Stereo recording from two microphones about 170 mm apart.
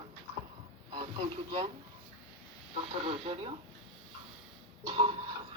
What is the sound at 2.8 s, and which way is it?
Speech, 35° right (ahead or behind).